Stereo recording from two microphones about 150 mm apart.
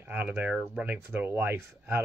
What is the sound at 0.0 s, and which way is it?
Speech, 10° right (ahead or behind).